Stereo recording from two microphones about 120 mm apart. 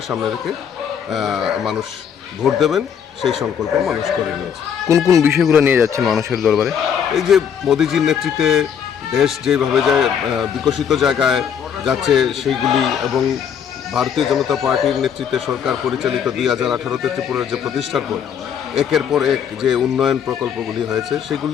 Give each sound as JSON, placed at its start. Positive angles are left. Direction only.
{"t": 1.1, "sound": "a man's voice", "side_deg": 0}
{"t": 4.9, "sound": "speech", "side_deg": -25}
{"t": 6.0, "sound": "a man's voice", "side_deg": 0}